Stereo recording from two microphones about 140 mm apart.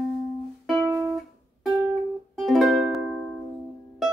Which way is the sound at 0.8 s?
20° right (ahead or behind).